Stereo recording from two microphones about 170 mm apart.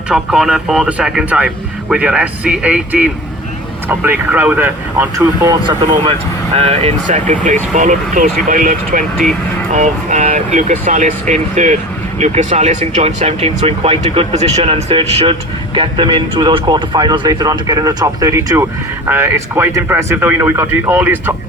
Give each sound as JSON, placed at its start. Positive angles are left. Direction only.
{"t": 0.1, "sound": "speech", "side_deg": -5}